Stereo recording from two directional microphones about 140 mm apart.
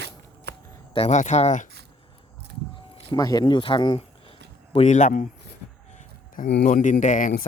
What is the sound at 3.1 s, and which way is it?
Speech, 25° left (ahead or behind).